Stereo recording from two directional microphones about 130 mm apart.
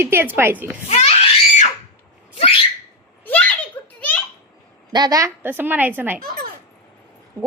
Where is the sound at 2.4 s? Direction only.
45° left (ahead or behind).